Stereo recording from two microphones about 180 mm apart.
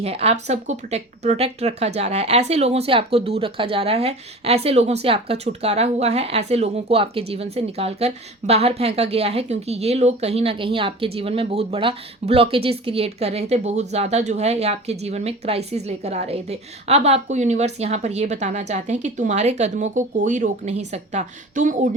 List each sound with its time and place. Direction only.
0.0 s a woman's voice: 35° right (ahead or behind)